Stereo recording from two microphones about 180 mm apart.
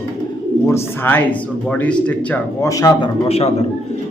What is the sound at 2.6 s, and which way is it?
Speech, 20° left (ahead or behind).